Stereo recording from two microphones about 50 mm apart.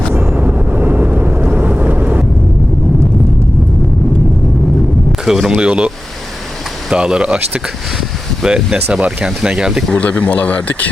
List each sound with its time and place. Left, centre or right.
0.2 s vehicle: right
5.2 s speech: centre
6.9 s speech: centre
8.4 s speech: centre
9.9 s speech: left